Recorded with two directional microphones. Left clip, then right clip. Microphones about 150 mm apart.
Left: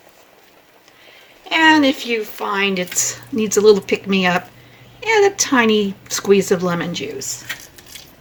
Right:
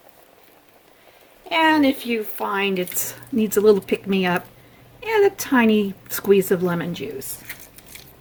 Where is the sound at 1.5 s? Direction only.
60° right (ahead or behind).